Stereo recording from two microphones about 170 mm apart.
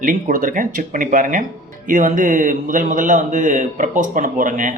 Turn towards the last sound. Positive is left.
turn(degrees=-50)  # may be behind; listen again after turning